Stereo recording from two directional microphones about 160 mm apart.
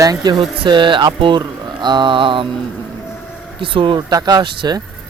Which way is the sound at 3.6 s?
35° right (ahead or behind).